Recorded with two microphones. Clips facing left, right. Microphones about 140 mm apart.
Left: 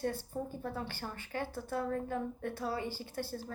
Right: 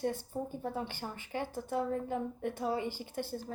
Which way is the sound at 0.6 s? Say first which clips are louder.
Right 2 dB; 15° right (ahead or behind).